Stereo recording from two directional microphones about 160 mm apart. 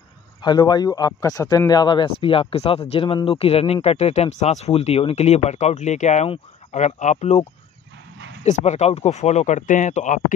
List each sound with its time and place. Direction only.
0.4 s speech: 25° left (ahead or behind); by 7.3 s 45° left (ahead or behind)
8.5 s speech: 45° left (ahead or behind)